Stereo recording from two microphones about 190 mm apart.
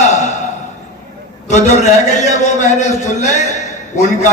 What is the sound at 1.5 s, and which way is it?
A man's voice, 35° left (ahead or behind).